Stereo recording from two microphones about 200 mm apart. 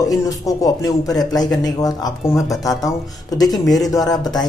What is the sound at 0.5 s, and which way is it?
A man's voice, 15° left (ahead or behind).